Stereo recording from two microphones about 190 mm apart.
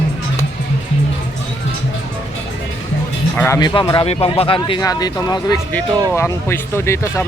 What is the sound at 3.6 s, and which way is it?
Speech, 20° left (ahead or behind).